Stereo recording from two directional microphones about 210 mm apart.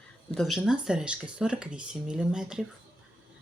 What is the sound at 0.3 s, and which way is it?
Speech, centre (ahead or behind).